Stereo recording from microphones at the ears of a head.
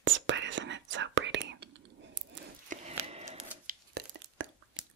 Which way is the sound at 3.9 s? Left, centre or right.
Right.